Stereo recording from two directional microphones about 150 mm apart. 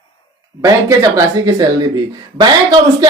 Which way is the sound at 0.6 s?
20° right (ahead or behind).